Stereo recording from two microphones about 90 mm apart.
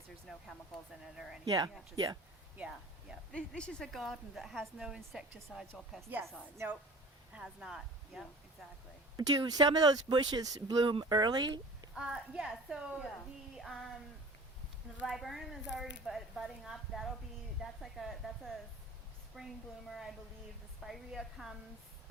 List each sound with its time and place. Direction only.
0.3 s a woman's voice: centre (ahead or behind)
1.5 s speech: 40° right (ahead or behind)
3.3 s speech: 10° left (ahead or behind)
3.9 s a woman's voice: centre (ahead or behind)
9.1 s speech: 45° right (ahead or behind)
11.9 s a woman's voice: 10° right (ahead or behind)
13.6 s a woman's voice: centre (ahead or behind)
15.0 s a woman's voice: centre (ahead or behind)